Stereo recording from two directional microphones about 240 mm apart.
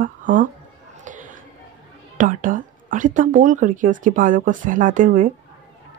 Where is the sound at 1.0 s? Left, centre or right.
Right.